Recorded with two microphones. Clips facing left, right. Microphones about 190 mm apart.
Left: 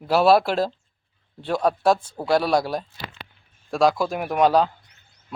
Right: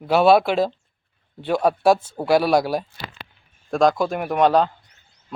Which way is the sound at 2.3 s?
Centre (ahead or behind).